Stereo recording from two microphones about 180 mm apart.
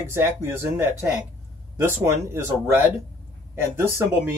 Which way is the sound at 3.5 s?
15° right (ahead or behind).